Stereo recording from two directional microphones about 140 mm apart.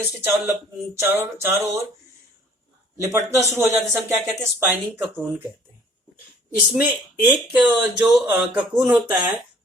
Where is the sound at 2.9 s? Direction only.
20° right (ahead or behind).